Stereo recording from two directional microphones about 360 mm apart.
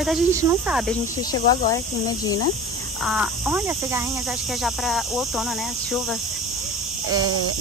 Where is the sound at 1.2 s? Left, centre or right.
Centre.